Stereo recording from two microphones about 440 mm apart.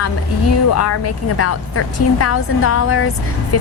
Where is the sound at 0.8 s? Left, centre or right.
Left.